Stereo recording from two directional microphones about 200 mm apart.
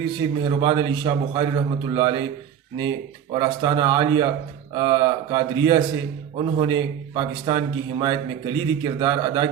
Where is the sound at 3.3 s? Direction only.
25° right (ahead or behind).